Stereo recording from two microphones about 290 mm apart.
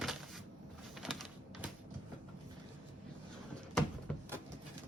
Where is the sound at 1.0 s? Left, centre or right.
Centre.